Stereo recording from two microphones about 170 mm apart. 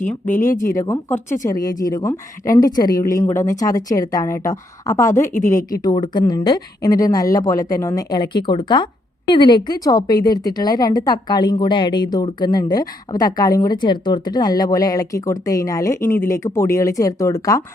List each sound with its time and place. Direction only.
0.3 s a woman's voice: 55° left (ahead or behind)
0.8 s a woman's voice: 15° left (ahead or behind)
5.3 s a woman's voice: 50° left (ahead or behind)
5.8 s a woman's voice: 25° left (ahead or behind)